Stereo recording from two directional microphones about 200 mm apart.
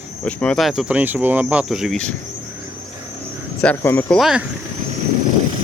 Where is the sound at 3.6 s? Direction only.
10° left (ahead or behind).